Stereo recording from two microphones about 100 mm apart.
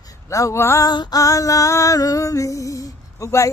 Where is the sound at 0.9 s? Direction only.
45° left (ahead or behind).